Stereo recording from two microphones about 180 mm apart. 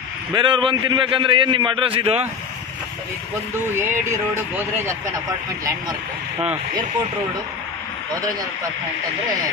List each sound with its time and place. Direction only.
0.3 s a man's voice: 25° right (ahead or behind)
3.7 s music: 10° right (ahead or behind)